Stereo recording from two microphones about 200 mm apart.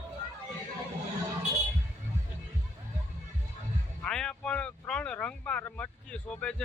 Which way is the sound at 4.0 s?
5° left (ahead or behind).